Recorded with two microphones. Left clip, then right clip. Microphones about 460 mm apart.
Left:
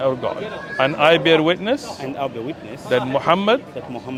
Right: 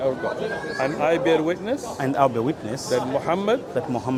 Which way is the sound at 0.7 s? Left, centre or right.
Left.